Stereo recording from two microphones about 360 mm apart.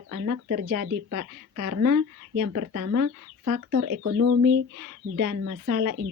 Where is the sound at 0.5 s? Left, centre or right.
Right.